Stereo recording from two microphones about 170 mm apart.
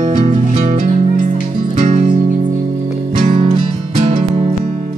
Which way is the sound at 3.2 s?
40° right (ahead or behind).